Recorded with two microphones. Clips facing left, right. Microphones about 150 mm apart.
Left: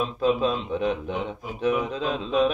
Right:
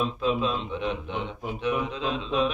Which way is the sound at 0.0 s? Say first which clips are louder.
Left 3 dB; 40° left (ahead or behind).